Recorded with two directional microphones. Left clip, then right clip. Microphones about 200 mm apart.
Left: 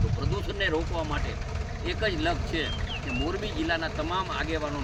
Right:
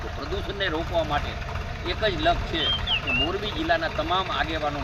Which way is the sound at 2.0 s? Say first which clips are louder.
Right 5 dB; 25° left (ahead or behind).